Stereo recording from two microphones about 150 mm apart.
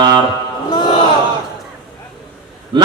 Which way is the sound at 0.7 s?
30° left (ahead or behind).